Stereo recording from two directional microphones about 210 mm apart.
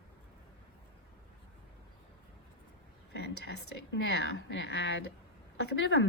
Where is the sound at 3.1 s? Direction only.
55° left (ahead or behind).